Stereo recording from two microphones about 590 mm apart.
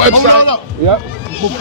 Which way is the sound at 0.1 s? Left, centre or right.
Right.